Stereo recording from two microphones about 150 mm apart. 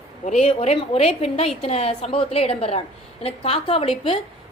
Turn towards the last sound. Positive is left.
turn(degrees=40)  # may be behind; listen again after turning